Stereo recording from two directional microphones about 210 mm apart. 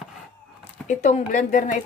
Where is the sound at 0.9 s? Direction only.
35° left (ahead or behind).